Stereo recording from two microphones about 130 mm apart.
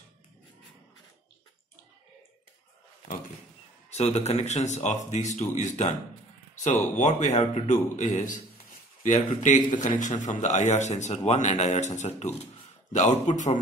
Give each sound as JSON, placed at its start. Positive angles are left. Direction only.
{"t": 3.9, "sound": "a man's voice", "side_deg": 60}
{"t": 9.4, "sound": "a man's voice", "side_deg": 75}